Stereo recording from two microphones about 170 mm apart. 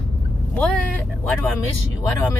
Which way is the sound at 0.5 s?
5° left (ahead or behind).